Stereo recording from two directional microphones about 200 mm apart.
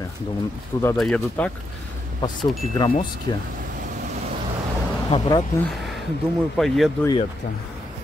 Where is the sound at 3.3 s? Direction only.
20° left (ahead or behind).